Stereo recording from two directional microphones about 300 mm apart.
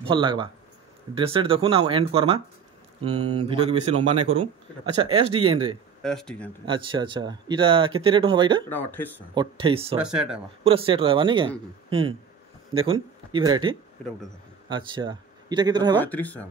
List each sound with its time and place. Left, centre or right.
0.0 s a man's voice: centre
6.0 s speech: centre
6.6 s a man's voice: centre
8.6 s speech: centre
9.3 s a man's voice: centre
10.0 s speech: centre
10.6 s a man's voice: centre
16.0 s speech: centre